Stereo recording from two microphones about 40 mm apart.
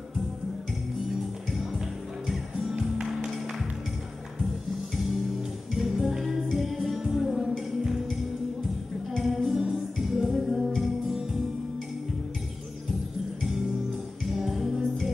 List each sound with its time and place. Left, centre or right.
1.6 s music: centre
5.8 s music: centre
14.3 s music: centre